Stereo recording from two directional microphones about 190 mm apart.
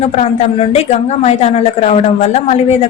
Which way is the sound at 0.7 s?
35° left (ahead or behind).